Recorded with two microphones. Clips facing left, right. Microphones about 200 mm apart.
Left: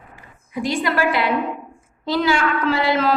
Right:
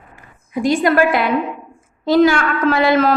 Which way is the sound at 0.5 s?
45° right (ahead or behind).